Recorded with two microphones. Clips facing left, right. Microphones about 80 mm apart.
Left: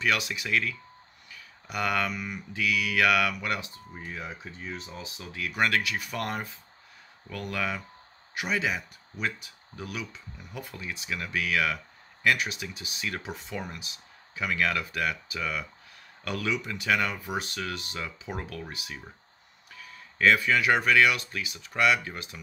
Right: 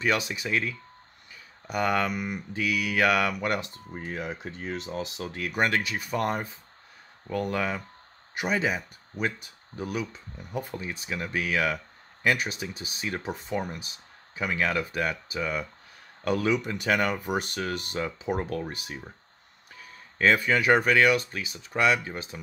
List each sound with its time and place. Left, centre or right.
0.0 s speech: right
3.3 s speech: right
3.9 s speech: right
4.2 s speech: right
5.3 s speech: right
5.7 s speech: right
16.5 s speech: right